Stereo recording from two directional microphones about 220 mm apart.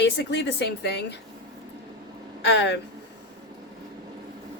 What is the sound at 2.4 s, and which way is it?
Speech, 55° left (ahead or behind).